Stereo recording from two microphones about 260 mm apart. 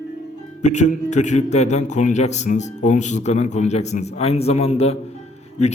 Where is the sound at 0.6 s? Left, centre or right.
Left.